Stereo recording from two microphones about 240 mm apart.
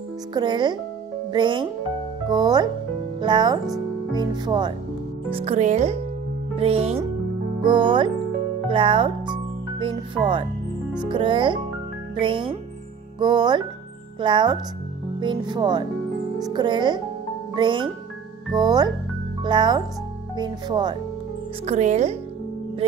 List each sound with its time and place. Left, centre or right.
0.3 s speech: centre
11.0 s speech: centre
21.6 s speech: right